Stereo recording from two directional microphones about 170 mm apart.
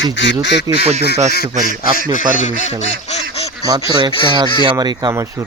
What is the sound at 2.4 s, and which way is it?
Speech, 45° left (ahead or behind).